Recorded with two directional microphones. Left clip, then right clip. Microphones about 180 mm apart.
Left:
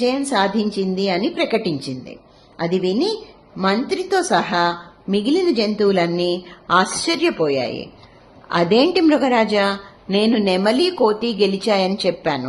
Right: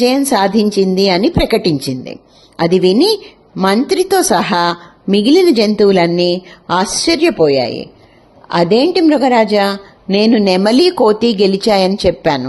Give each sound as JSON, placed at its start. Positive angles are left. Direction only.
{"t": 0.0, "sound": "a woman's voice", "side_deg": -45}
{"t": 5.0, "sound": "a woman's voice", "side_deg": -40}
{"t": 10.2, "sound": "speech", "side_deg": -40}